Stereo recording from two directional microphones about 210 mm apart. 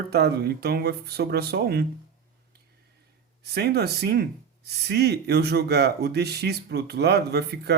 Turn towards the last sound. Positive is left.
turn(degrees=-50)  # may be behind; listen again after turning